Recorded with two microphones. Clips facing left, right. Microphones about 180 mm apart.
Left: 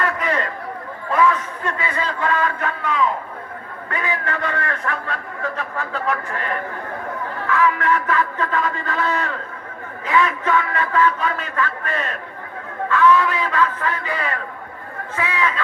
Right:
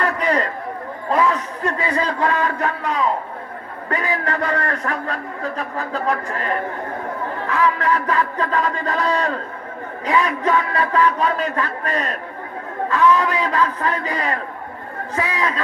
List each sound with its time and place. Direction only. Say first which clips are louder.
0.0 s chatter: right 3 dB; 35° right (ahead or behind)
1.1 s a man's voice: left 1 dB; 35° right (ahead or behind)